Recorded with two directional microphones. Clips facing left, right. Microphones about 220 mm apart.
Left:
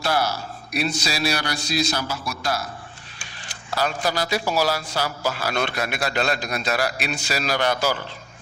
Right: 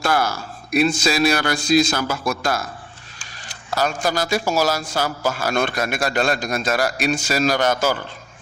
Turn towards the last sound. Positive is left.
turn(degrees=-45)  # may be behind; listen again after turning